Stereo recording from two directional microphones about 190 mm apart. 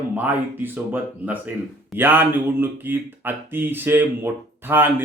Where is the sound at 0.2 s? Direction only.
10° right (ahead or behind).